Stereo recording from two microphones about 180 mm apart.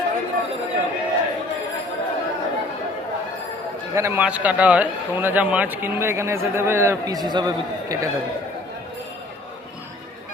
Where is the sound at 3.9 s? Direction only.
15° right (ahead or behind).